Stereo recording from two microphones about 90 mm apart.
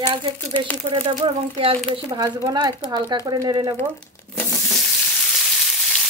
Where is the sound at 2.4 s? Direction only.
50° right (ahead or behind).